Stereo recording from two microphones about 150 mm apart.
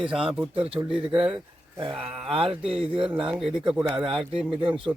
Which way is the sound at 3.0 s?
5° right (ahead or behind).